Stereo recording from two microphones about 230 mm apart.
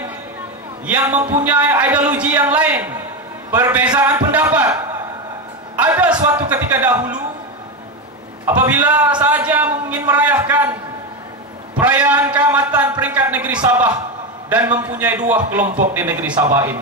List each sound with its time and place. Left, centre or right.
0.8 s a man's voice: centre
8.5 s a man's voice: centre
14.7 s a man's voice: centre
15.6 s speech: right
15.9 s a man's voice: centre